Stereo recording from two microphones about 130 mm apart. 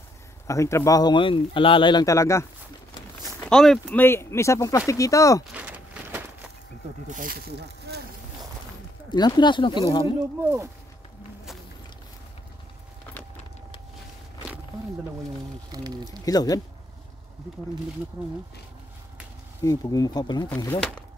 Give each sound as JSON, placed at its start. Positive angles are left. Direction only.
{"t": 0.5, "sound": "speech", "side_deg": 20}
{"t": 2.0, "sound": "speech", "side_deg": 25}
{"t": 3.4, "sound": "speech", "side_deg": 5}
{"t": 4.0, "sound": "speech", "side_deg": 20}
{"t": 5.5, "sound": "a sound", "side_deg": -10}
{"t": 7.1, "sound": "speech", "side_deg": -90}
{"t": 9.1, "sound": "speech", "side_deg": 35}
{"t": 16.3, "sound": "speech", "side_deg": 30}
{"t": 19.6, "sound": "speech", "side_deg": 25}
{"t": 20.4, "sound": "speech", "side_deg": 15}